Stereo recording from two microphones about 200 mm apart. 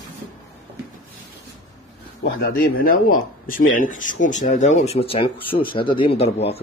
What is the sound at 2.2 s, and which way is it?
Speech, 50° left (ahead or behind).